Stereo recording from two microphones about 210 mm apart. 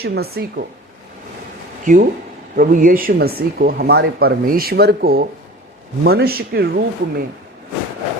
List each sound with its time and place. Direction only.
0.0 s speech: 50° right (ahead or behind)
1.8 s speech: 40° right (ahead or behind)